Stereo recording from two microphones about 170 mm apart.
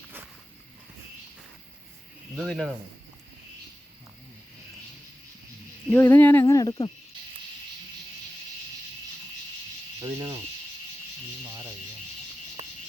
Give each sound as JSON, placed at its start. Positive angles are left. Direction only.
{"t": 2.3, "sound": "speech", "side_deg": 0}
{"t": 5.9, "sound": "a sound", "side_deg": 10}
{"t": 6.4, "sound": "speech", "side_deg": 20}
{"t": 10.0, "sound": "speech", "side_deg": -20}
{"t": 11.4, "sound": "rub", "side_deg": -20}